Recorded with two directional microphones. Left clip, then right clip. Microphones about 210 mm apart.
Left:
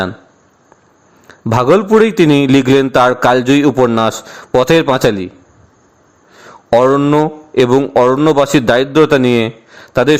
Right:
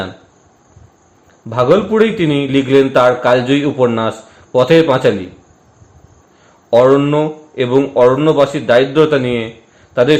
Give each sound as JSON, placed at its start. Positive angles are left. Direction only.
{"t": 1.5, "sound": "a man's voice", "side_deg": 60}
{"t": 6.7, "sound": "a man's voice", "side_deg": 55}